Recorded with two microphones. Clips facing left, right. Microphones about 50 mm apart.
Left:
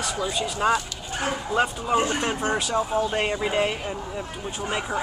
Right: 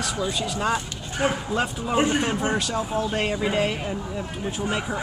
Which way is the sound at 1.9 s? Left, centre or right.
Centre.